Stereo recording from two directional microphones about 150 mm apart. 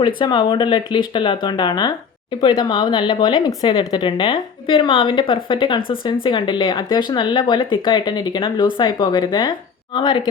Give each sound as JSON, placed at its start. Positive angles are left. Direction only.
{"t": 0.0, "sound": "a woman's voice", "side_deg": 30}